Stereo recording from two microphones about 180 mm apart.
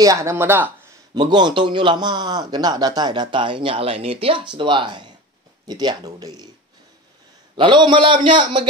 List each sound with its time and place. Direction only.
0.0 s speech: 15° right (ahead or behind)
1.1 s a man's voice: 25° right (ahead or behind)
7.5 s a man's voice: 25° right (ahead or behind)